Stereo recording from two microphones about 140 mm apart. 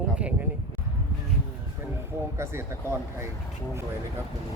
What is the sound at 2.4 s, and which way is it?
Speech, 20° right (ahead or behind).